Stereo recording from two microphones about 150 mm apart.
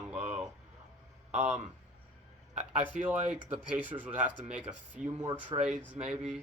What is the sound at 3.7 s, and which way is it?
Speech, 10° right (ahead or behind).